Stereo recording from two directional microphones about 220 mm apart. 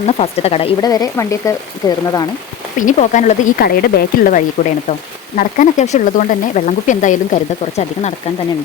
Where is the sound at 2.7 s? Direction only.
35° left (ahead or behind).